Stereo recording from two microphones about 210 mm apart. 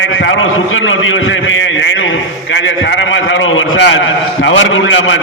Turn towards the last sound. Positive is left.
turn(degrees=65)  # may be behind; listen again after turning